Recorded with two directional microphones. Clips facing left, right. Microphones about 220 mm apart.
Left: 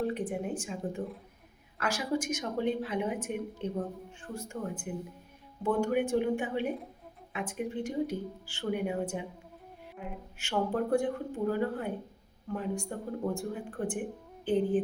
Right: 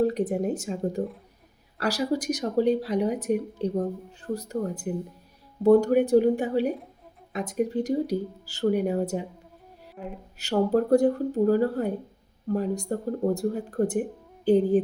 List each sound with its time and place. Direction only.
0.0 s a woman's voice: 40° right (ahead or behind)